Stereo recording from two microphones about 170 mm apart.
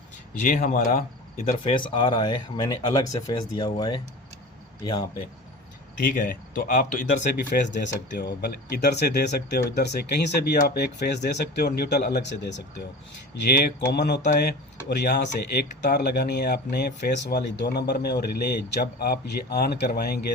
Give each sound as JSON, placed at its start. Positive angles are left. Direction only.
{"t": 0.4, "sound": "speech", "side_deg": 45}
{"t": 6.1, "sound": "speech", "side_deg": 55}
{"t": 7.7, "sound": "speech", "side_deg": 85}
{"t": 14.3, "sound": "speech", "side_deg": 70}